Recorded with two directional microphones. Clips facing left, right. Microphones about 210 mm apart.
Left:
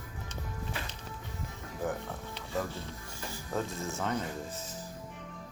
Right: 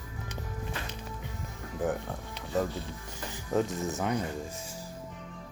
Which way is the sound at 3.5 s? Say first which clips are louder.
Right 6 dB; 20° right (ahead or behind).